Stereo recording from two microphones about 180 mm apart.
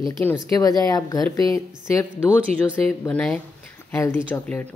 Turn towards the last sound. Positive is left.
turn(degrees=10)  # may be behind; listen again after turning